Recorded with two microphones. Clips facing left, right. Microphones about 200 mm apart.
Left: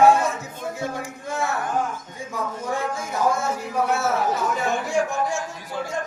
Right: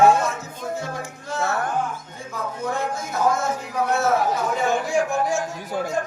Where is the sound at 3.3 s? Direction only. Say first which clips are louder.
Right 1 dB; 10° left (ahead or behind).